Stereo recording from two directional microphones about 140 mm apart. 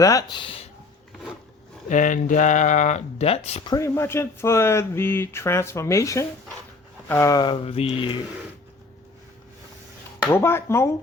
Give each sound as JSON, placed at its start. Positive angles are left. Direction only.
{"t": 0.0, "sound": "speech", "side_deg": 25}
{"t": 1.9, "sound": "speech", "side_deg": 65}
{"t": 3.7, "sound": "speech", "side_deg": 20}
{"t": 7.3, "sound": "mantra", "side_deg": 35}
{"t": 10.2, "sound": "speech", "side_deg": 15}